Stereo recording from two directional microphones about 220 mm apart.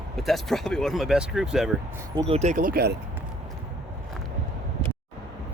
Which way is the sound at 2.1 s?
25° right (ahead or behind).